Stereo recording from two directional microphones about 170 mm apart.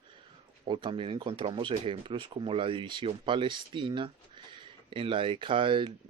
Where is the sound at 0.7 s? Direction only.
30° right (ahead or behind).